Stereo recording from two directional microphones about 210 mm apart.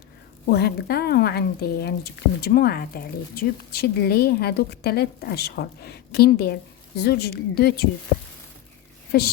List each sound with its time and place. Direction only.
0.5 s a woman's voice: 50° left (ahead or behind)
9.1 s a woman's voice: 45° left (ahead or behind)